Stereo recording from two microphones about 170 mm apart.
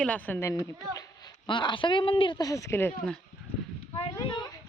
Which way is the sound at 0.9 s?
20° left (ahead or behind).